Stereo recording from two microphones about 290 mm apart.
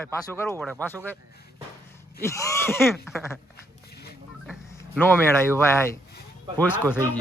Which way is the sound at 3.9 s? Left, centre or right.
Left.